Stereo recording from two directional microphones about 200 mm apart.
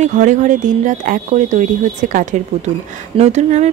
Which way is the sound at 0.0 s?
35° right (ahead or behind).